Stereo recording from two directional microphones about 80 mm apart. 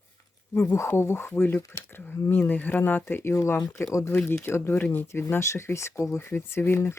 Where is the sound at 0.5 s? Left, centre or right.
Left.